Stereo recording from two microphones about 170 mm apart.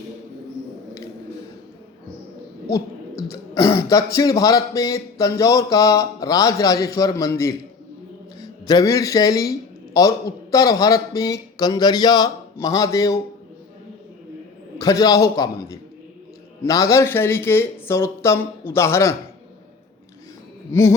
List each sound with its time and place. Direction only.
3.8 s speech: 20° left (ahead or behind)
14.8 s speech: 20° left (ahead or behind)